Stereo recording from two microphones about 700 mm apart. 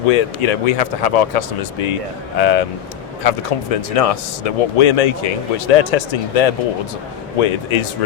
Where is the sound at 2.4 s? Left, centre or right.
Left.